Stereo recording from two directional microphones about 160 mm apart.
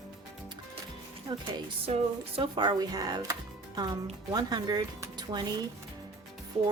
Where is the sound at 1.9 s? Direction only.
35° right (ahead or behind).